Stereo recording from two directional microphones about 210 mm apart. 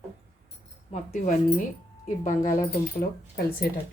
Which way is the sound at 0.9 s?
35° left (ahead or behind).